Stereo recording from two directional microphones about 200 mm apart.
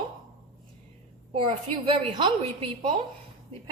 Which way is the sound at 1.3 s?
25° right (ahead or behind).